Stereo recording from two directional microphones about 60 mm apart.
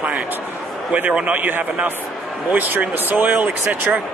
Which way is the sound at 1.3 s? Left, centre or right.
Right.